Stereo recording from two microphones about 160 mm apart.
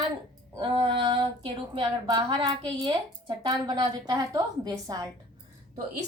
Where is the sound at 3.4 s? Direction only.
25° right (ahead or behind).